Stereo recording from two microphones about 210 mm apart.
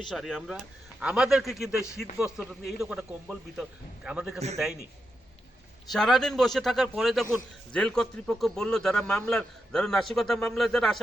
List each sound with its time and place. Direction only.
0.0 s a man's voice: centre (ahead or behind)
5.9 s a man's voice: centre (ahead or behind)